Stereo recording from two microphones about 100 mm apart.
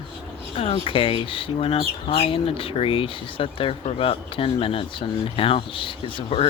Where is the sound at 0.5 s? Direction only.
65° left (ahead or behind).